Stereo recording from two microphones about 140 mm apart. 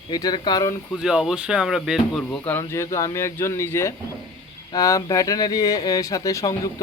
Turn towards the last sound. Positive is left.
turn(degrees=25)  # may be behind; listen again after turning